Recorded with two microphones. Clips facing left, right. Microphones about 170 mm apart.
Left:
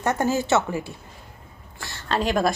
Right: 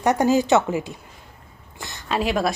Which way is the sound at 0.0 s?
15° right (ahead or behind).